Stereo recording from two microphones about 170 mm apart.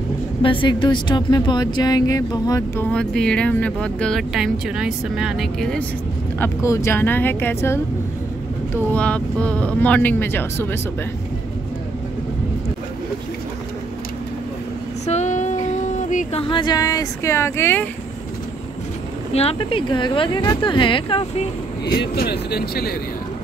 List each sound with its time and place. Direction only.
0.4 s speech: 30° left (ahead or behind); by 5.9 s centre (ahead or behind)
6.4 s speech: 15° left (ahead or behind)
8.9 s speech: 10° left (ahead or behind)
15.0 s a sound: 45° left (ahead or behind)
16.3 s speech: 30° left (ahead or behind); by 17.8 s 15° left (ahead or behind)
19.3 s speech: 35° left (ahead or behind)
21.9 s speech: 65° left (ahead or behind)